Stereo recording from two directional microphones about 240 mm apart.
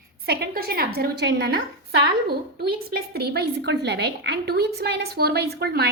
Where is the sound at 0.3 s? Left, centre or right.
Right.